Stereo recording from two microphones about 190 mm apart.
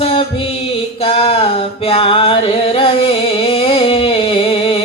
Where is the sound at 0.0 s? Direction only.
30° left (ahead or behind).